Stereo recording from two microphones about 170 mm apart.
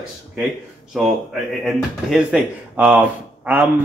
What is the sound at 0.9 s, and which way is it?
A man's voice, centre (ahead or behind).